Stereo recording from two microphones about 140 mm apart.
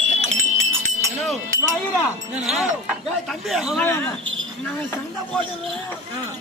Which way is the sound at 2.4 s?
Centre (ahead or behind).